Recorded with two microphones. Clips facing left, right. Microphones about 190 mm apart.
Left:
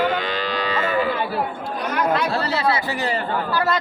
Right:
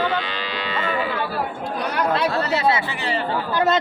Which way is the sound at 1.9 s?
30° right (ahead or behind).